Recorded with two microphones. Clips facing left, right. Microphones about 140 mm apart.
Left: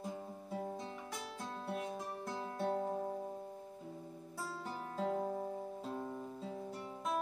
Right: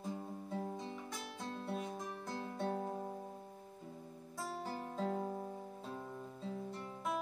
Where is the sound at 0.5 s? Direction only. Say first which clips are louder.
Left 1 dB; 5° left (ahead or behind).